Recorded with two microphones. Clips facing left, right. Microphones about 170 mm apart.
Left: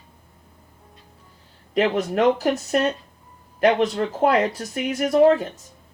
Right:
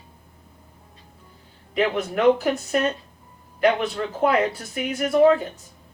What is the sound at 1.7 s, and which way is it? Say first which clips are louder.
Speech: left 2 dB; 40° left (ahead or behind).